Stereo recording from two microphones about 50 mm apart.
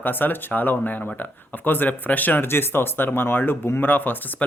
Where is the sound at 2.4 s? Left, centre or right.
Left.